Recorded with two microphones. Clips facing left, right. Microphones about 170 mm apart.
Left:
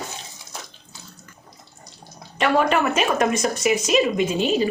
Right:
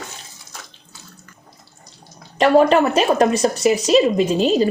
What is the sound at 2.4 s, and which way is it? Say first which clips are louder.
A woman's voice: right 6 dB; 35° right (ahead or behind).